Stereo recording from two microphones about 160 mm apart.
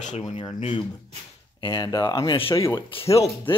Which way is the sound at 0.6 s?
40° left (ahead or behind).